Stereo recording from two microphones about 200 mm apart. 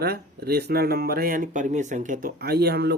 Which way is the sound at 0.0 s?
50° right (ahead or behind).